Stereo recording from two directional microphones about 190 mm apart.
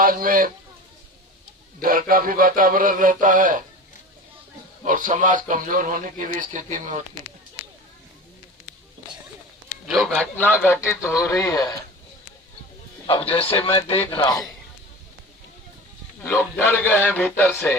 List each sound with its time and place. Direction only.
0.0 s speech: 50° right (ahead or behind)
1.8 s speech: 50° right (ahead or behind)
4.9 s speech: 45° right (ahead or behind)
9.8 s speech: centre (ahead or behind); by 11.7 s 20° left (ahead or behind)
13.1 s a man's voice: 30° left (ahead or behind)
16.2 s speech: 10° left (ahead or behind)